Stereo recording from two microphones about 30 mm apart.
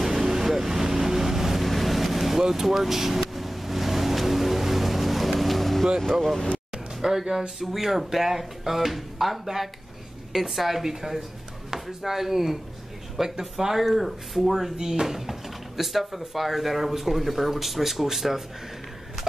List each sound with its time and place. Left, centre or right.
0.0 s vehicle: centre
1.6 s vehicle: centre
2.4 s speech: centre
3.2 s vehicle: centre
6.2 s speech: centre
6.7 s music: centre
7.7 s speech: centre
10.8 s speech: centre
13.7 s speech: centre